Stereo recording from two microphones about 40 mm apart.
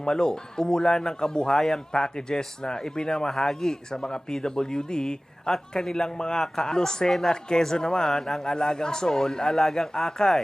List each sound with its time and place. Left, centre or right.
0.0 s speech: centre